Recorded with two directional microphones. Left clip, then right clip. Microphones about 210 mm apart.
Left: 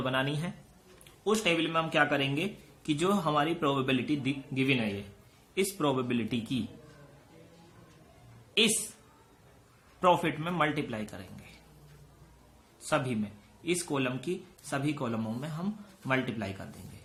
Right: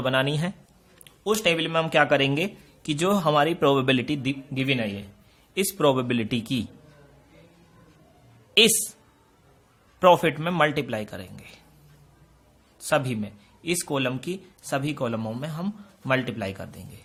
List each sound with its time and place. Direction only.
0.0 s a man's voice: 50° right (ahead or behind)
10.0 s a man's voice: 50° right (ahead or behind)
12.9 s a man's voice: 50° right (ahead or behind)